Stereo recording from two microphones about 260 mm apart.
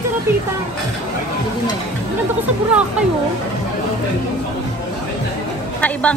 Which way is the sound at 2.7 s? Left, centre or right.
Centre.